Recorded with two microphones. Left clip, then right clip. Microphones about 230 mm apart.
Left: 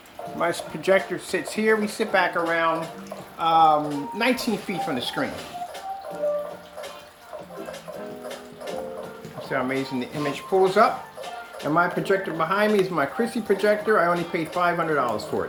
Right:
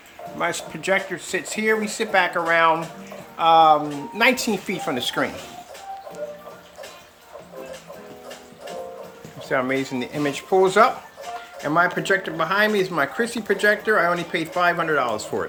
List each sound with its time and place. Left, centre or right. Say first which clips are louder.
0.3 s speech: even; centre
9.4 s speech: right 3 dB; centre